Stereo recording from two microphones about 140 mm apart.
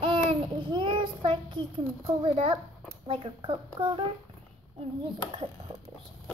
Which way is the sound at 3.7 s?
35° right (ahead or behind).